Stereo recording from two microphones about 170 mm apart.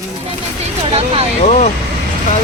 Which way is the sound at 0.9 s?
35° right (ahead or behind).